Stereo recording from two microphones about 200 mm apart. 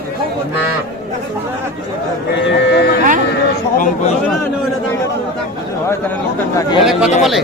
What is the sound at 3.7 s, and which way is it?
Speech, 40° left (ahead or behind).